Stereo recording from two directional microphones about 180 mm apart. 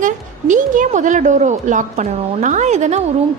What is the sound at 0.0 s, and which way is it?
A woman's voice, 45° right (ahead or behind).